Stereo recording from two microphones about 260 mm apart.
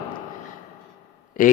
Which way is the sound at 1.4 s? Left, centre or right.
Left.